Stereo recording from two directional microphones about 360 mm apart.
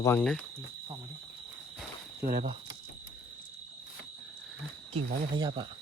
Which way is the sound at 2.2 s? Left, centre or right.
Right.